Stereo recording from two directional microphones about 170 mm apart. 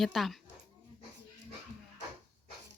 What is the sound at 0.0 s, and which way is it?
Speech, centre (ahead or behind).